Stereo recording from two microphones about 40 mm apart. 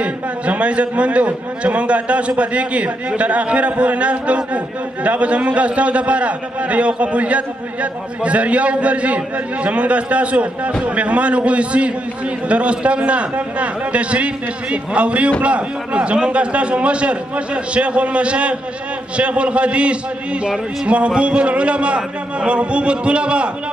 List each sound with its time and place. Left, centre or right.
0.0 s a man's voice: right